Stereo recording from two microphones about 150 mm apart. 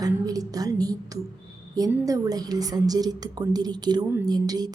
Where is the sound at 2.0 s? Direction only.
25° right (ahead or behind).